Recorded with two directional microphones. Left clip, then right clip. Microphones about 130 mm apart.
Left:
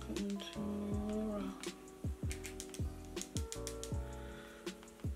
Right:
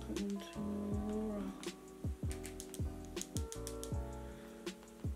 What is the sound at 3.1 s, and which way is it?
Music, 5° right (ahead or behind).